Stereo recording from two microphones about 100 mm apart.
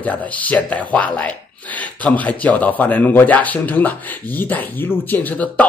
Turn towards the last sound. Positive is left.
turn(degrees=15)  # may be behind; listen again after turning